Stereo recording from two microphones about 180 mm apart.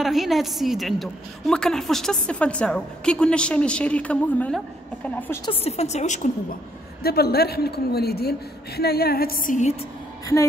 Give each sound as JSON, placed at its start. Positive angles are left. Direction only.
{"t": 0.0, "sound": "a woman's voice", "side_deg": 0}
{"t": 5.4, "sound": "a woman's voice", "side_deg": 35}
{"t": 7.0, "sound": "a woman's voice", "side_deg": 60}